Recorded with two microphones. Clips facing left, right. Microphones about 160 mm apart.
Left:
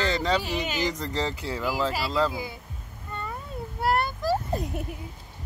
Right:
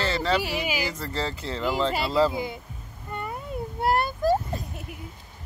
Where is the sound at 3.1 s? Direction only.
15° right (ahead or behind).